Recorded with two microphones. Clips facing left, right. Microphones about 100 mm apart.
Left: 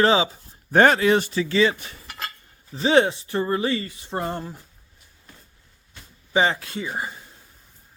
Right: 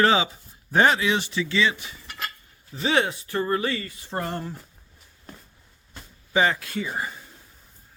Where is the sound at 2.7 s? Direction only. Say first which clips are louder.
Left 5 dB; 30° left (ahead or behind).